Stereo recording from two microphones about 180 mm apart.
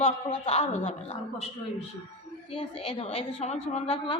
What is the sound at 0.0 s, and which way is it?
A child's voice, 35° left (ahead or behind).